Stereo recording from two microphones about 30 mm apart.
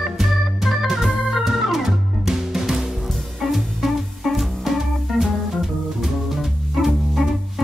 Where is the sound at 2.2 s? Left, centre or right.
Centre.